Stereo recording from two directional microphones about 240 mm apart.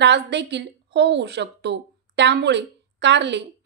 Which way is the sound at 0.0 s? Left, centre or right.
Right.